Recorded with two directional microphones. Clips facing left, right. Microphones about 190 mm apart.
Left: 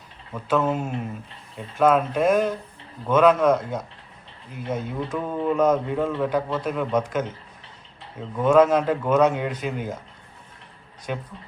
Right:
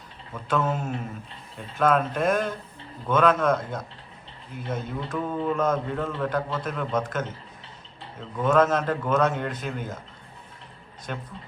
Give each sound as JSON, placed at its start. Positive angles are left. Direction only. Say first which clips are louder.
{"t": 0.4, "sound": "speech", "louder": "left 3 dB", "side_deg": 10}
{"t": 8.4, "sound": "speech", "louder": "left 4 dB", "side_deg": 10}